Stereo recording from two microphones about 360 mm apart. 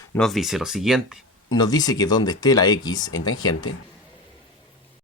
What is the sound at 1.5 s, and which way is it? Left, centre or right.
Speech, centre.